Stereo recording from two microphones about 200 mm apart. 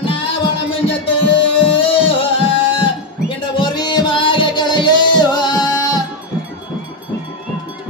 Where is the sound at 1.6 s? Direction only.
25° left (ahead or behind).